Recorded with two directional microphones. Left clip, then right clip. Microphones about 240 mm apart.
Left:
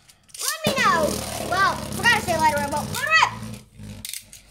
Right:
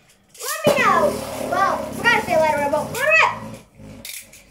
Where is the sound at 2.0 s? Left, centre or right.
Left.